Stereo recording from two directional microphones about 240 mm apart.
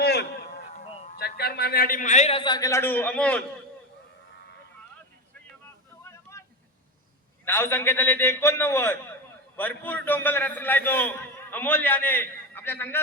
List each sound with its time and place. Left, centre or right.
0.0 s a sound: left
1.2 s a man's voice: left; by 3.4 s centre
7.4 s a man's voice: centre